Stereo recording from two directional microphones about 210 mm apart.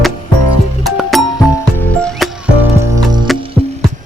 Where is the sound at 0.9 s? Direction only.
Centre (ahead or behind).